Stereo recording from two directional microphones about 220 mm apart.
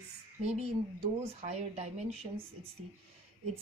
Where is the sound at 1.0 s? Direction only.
30° right (ahead or behind).